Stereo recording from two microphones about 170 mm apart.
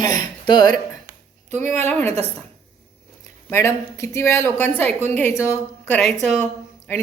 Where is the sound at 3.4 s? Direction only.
15° left (ahead or behind).